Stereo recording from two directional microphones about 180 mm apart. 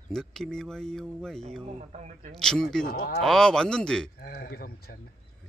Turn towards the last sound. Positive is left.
turn(degrees=60)  # may be behind; listen again after turning